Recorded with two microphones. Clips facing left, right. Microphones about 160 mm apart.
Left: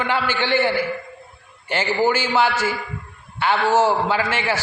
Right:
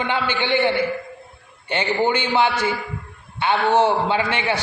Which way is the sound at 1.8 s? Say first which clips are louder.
Even; 5° left (ahead or behind).